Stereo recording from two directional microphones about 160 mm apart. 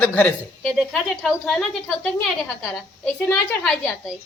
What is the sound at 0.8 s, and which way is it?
Speech, centre (ahead or behind).